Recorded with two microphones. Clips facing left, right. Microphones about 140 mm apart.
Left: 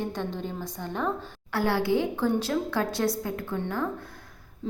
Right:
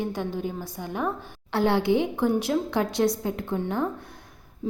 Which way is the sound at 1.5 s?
20° right (ahead or behind).